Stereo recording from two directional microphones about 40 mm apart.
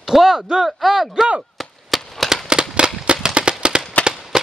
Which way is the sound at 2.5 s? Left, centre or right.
Right.